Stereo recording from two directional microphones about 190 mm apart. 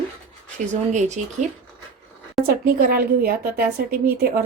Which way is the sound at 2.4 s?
50° right (ahead or behind).